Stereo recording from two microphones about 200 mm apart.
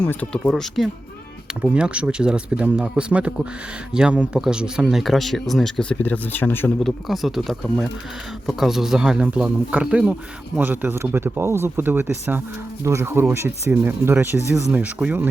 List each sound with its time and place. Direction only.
0.0 s speech: 10° left (ahead or behind); by 15.3 s 10° right (ahead or behind)